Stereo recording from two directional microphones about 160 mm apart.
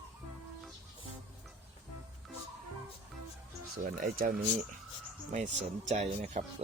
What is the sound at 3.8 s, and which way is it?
Speech, 60° right (ahead or behind).